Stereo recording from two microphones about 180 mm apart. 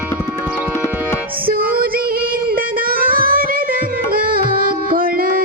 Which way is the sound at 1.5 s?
55° right (ahead or behind).